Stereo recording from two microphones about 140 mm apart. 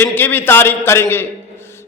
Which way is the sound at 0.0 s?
15° left (ahead or behind).